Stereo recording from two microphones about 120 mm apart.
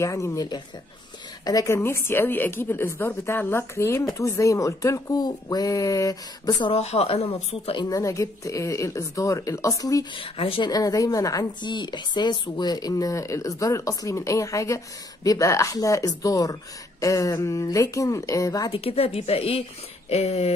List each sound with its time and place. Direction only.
0.0 s speech: 25° left (ahead or behind)
6.6 s speech: 55° left (ahead or behind)
7.9 s speech: 25° left (ahead or behind)
10.1 s speech: 50° left (ahead or behind)
10.7 s speech: 30° left (ahead or behind)
18.7 s speech: 55° left (ahead or behind)